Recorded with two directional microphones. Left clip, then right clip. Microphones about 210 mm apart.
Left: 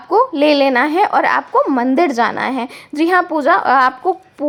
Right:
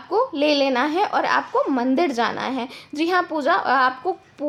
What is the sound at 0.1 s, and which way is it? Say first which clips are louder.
A woman's voice: left 7 dB; 20° left (ahead or behind).